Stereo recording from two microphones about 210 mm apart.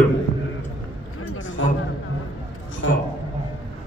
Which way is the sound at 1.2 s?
65° left (ahead or behind).